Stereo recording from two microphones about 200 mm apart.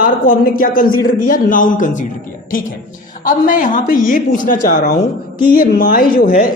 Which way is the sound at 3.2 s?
45° left (ahead or behind).